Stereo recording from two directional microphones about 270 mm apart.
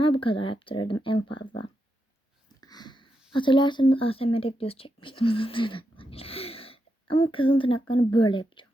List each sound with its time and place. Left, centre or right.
0.0 s speech: centre
2.6 s speech: centre